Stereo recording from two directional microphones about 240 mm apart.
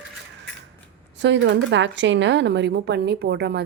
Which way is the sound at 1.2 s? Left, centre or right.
Right.